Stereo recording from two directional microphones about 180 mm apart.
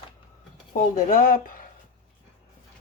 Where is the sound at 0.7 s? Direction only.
50° left (ahead or behind).